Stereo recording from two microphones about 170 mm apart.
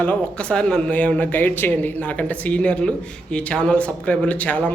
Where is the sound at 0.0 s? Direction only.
10° left (ahead or behind).